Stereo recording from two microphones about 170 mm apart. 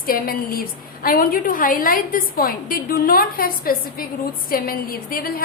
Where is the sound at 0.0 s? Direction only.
60° left (ahead or behind).